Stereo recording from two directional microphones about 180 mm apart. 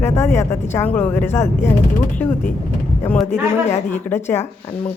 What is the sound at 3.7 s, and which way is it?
Speech, 15° left (ahead or behind).